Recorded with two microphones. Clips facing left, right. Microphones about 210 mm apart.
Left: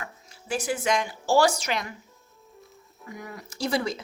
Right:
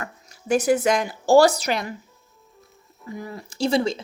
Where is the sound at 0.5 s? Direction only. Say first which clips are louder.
Right 7 dB; 40° right (ahead or behind).